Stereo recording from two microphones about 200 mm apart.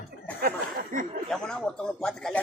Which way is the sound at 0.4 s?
45° right (ahead or behind).